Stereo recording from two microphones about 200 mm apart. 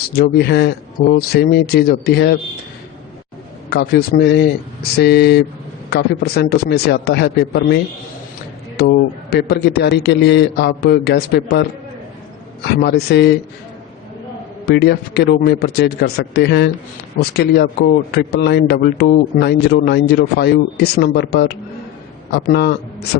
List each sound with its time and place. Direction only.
0.1 s speech: 55° left (ahead or behind)
3.7 s a man's voice: 55° left (ahead or behind)
8.8 s a man's voice: 55° left (ahead or behind)
12.6 s a man's voice: 55° left (ahead or behind)
14.7 s a man's voice: 55° left (ahead or behind)